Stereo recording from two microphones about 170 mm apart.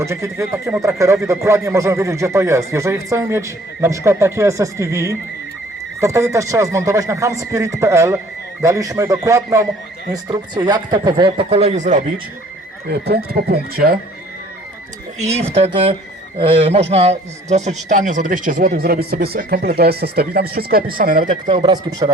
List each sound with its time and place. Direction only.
0.0 s speech: 15° right (ahead or behind); by 12.2 s 45° right (ahead or behind)
12.9 s speech: 70° right (ahead or behind)
15.2 s a man's voice: 35° right (ahead or behind)
21.5 s speech: 25° right (ahead or behind)